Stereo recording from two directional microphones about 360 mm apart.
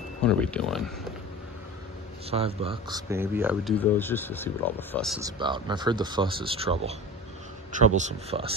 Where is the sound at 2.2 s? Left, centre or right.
Centre.